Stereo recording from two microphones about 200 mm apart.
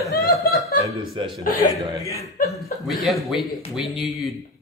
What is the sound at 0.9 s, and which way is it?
Speech, 25° right (ahead or behind).